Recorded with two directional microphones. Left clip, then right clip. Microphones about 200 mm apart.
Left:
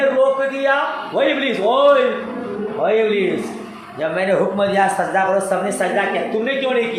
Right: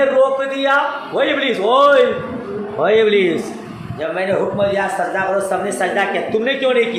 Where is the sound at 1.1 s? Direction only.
15° right (ahead or behind).